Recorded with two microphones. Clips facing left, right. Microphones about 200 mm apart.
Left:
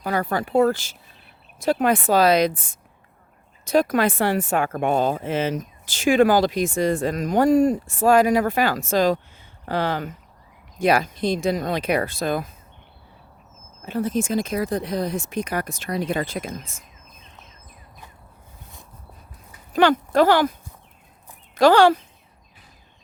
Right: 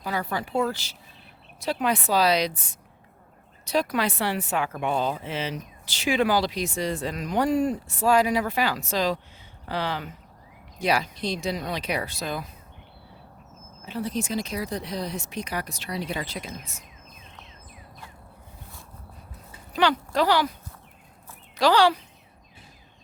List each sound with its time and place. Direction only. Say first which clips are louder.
0.0 s speech: left 5 dB; 50° left (ahead or behind)
13.8 s speech: left 6 dB; 50° left (ahead or behind)
19.7 s speech: left 6 dB; 50° left (ahead or behind)
21.5 s speech: left 5 dB; 50° left (ahead or behind)